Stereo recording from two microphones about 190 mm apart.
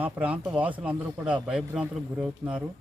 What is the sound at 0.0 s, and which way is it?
Speech, 10° right (ahead or behind).